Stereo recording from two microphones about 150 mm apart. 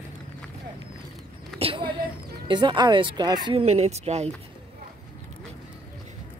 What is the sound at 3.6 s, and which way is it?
Speech, 45° right (ahead or behind).